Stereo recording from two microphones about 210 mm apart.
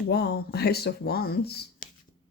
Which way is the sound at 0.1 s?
50° left (ahead or behind).